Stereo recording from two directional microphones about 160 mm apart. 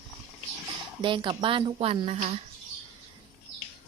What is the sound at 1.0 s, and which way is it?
A woman's voice, 30° right (ahead or behind).